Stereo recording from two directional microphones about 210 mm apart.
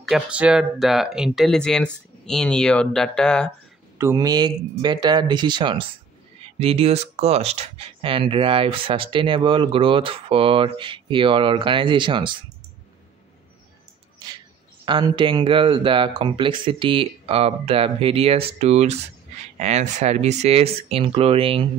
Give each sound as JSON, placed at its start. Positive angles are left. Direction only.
{"t": 0.0, "sound": "speech", "side_deg": -5}
{"t": 4.0, "sound": "speech", "side_deg": -15}
{"t": 14.9, "sound": "speech", "side_deg": -20}